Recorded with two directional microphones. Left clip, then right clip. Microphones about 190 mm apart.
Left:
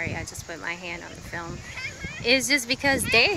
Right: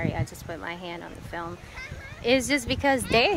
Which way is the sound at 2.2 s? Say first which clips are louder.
Left 2 dB; 15° right (ahead or behind).